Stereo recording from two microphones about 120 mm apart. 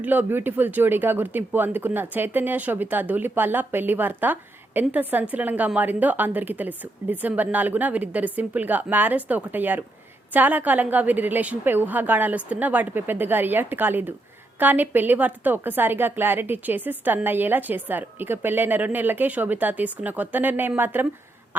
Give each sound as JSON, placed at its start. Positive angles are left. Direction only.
{"t": 0.0, "sound": "speech", "side_deg": -15}